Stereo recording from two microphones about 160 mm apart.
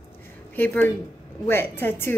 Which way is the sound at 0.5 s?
10° left (ahead or behind).